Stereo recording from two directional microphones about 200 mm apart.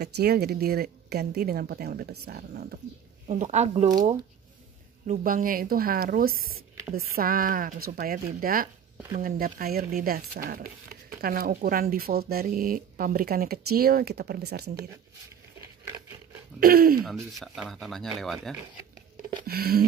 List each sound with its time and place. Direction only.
0.0 s speech: 50° right (ahead or behind)
3.3 s speech: 35° right (ahead or behind)
5.0 s speech: 40° right (ahead or behind)
16.5 s speech: 50° right (ahead or behind)
17.0 s speech: centre (ahead or behind)
19.4 s a sound: 50° right (ahead or behind)